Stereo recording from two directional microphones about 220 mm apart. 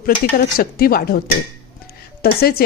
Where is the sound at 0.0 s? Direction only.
40° left (ahead or behind).